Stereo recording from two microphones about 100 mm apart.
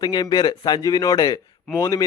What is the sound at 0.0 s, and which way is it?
Speech, 45° left (ahead or behind).